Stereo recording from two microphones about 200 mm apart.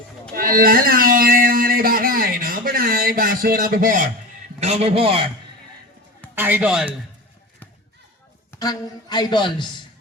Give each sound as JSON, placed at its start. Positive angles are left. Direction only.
{"t": 0.3, "sound": "a sound", "side_deg": -45}
{"t": 4.6, "sound": "a man's voice", "side_deg": -30}
{"t": 6.3, "sound": "a man's voice", "side_deg": -10}
{"t": 8.5, "sound": "a man's voice", "side_deg": 20}